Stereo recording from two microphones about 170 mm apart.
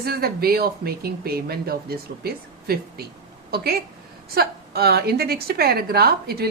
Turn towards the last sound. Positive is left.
turn(degrees=-65)  # may be behind; listen again after turning